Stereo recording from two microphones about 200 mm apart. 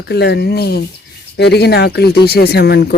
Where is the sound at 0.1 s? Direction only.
55° left (ahead or behind).